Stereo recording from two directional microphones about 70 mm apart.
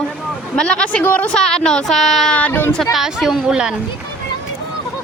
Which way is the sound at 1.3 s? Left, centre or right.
Centre.